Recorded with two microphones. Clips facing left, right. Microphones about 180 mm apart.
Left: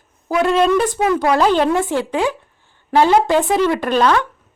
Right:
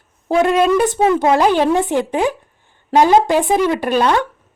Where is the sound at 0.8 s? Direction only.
25° right (ahead or behind).